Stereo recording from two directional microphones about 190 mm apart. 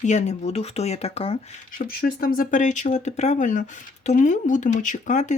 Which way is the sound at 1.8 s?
50° left (ahead or behind).